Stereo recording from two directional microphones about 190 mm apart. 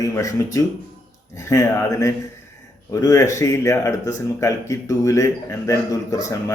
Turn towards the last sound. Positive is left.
turn(degrees=15)  # may be behind; listen again after turning